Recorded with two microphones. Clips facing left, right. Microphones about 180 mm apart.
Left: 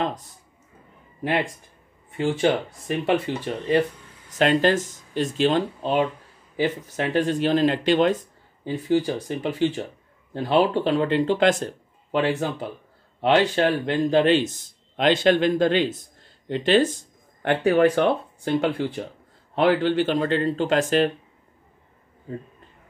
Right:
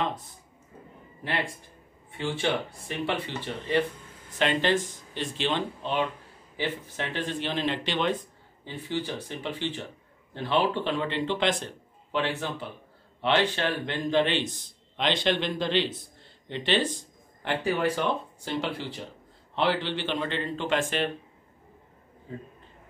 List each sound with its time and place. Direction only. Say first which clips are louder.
2.1 s a man's voice: left 7 dB; 40° left (ahead or behind)